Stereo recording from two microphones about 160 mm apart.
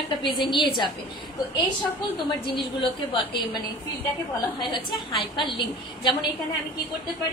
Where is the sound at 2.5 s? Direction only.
30° left (ahead or behind).